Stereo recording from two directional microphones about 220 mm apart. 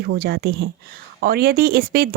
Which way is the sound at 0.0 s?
45° right (ahead or behind).